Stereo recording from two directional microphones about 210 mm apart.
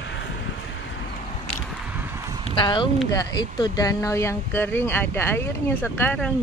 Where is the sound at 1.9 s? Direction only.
10° right (ahead or behind).